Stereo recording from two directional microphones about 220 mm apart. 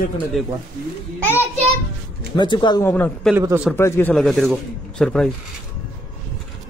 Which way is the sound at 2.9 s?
10° left (ahead or behind).